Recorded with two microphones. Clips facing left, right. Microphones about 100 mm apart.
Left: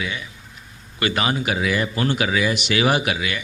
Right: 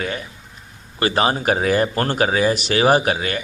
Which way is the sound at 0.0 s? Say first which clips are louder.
Right 3 dB; 45° right (ahead or behind).